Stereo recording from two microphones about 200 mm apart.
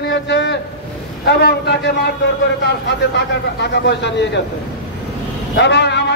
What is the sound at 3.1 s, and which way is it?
A man's voice, 60° left (ahead or behind).